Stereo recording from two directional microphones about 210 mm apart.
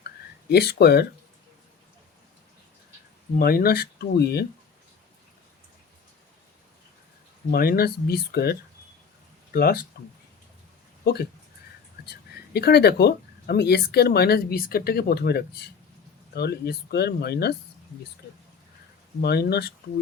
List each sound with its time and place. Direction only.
0.5 s speech: 50° left (ahead or behind)
3.3 s speech: 45° left (ahead or behind)
7.5 s speech: 45° left (ahead or behind)
11.0 s speech: 50° left (ahead or behind)
12.5 s speech: 50° left (ahead or behind)
19.2 s speech: 50° left (ahead or behind)